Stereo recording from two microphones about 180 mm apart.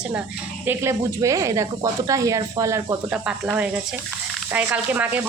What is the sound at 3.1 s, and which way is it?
Speech, 5° right (ahead or behind).